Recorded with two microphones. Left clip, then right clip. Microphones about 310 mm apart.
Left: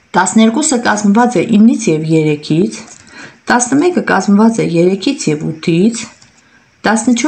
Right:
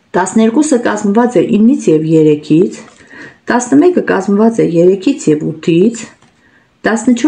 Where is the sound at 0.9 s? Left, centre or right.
Left.